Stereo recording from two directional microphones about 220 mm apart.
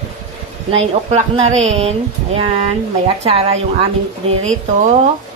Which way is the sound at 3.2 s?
30° right (ahead or behind).